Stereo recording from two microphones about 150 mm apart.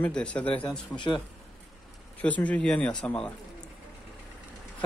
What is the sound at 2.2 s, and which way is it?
Speech, 10° left (ahead or behind).